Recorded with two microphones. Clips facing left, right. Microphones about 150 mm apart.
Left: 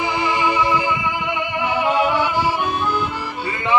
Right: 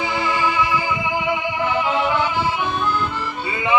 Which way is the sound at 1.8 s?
10° left (ahead or behind).